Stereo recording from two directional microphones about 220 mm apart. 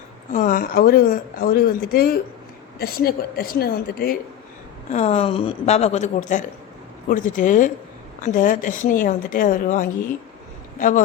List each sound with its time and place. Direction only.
0.3 s a woman's voice: 40° left (ahead or behind)
4.9 s speech: 30° left (ahead or behind)